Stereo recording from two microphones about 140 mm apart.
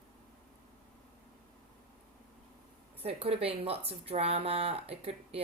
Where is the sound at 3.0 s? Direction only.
45° right (ahead or behind).